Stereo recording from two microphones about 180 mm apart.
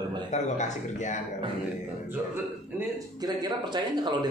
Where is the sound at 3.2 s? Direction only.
20° right (ahead or behind).